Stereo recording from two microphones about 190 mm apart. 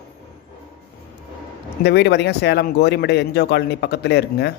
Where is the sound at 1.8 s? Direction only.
60° left (ahead or behind).